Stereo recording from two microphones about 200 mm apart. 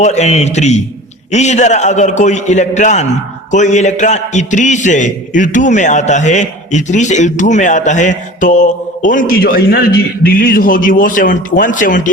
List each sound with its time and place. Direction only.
0.0 s a man's voice: 35° left (ahead or behind)